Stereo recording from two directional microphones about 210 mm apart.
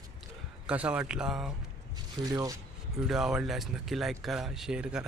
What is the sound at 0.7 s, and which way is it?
Speech, 5° right (ahead or behind).